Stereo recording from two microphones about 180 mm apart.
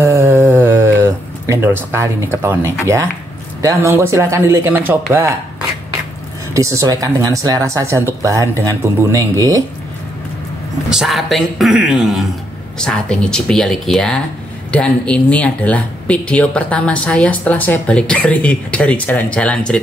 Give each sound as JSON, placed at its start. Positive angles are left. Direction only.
{"t": 0.0, "sound": "a sound", "side_deg": -15}
{"t": 3.6, "sound": "speech", "side_deg": -15}
{"t": 6.5, "sound": "speech", "side_deg": -15}
{"t": 10.9, "sound": "speech", "side_deg": 0}